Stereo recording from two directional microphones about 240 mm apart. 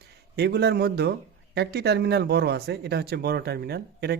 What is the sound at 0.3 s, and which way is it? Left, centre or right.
Speech, right.